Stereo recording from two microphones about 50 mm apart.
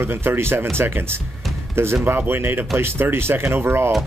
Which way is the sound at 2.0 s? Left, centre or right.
Right.